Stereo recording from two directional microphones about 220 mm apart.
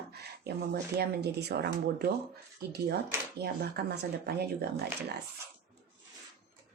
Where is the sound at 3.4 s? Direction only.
45° right (ahead or behind).